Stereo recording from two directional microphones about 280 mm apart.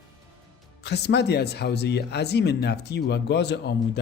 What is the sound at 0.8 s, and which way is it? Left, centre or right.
Speech, left.